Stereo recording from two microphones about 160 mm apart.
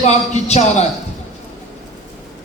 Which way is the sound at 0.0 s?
45° left (ahead or behind).